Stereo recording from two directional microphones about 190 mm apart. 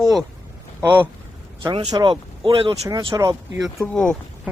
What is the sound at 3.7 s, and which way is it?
Speech, 5° left (ahead or behind).